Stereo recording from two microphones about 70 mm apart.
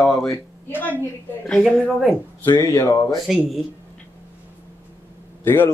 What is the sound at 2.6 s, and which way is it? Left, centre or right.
Speech, left.